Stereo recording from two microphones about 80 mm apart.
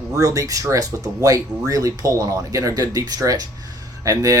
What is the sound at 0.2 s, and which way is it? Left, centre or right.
Speech, right.